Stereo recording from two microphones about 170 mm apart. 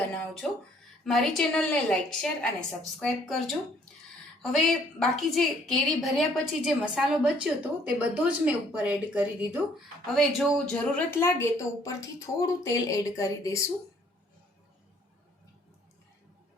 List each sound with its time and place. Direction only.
1.0 s a woman's voice: centre (ahead or behind)
4.5 s a woman's voice: centre (ahead or behind)
10.2 s speech: 5° left (ahead or behind); by 13.6 s 20° left (ahead or behind)